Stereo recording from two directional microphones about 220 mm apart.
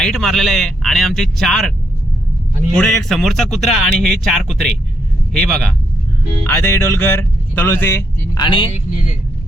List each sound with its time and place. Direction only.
0.0 s speech: centre (ahead or behind)
2.7 s speech: 5° left (ahead or behind); by 8.7 s 20° left (ahead or behind)